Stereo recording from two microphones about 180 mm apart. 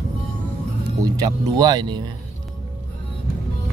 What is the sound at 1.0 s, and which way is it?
Speech, 20° right (ahead or behind).